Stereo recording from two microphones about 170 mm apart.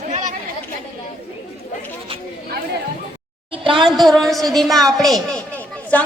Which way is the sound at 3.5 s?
30° right (ahead or behind).